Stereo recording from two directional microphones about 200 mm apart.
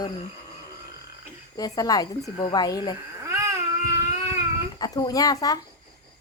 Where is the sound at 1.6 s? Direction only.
20° left (ahead or behind).